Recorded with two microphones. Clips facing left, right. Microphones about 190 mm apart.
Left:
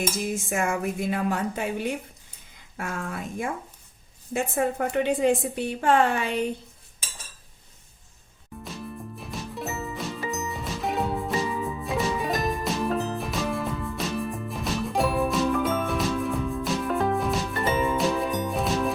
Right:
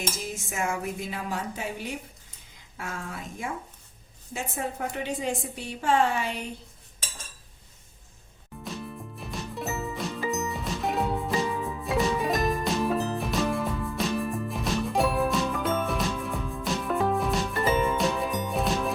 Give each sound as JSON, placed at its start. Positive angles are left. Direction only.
{"t": 1.1, "sound": "a woman's voice", "side_deg": 55}
{"t": 8.6, "sound": "music", "side_deg": 0}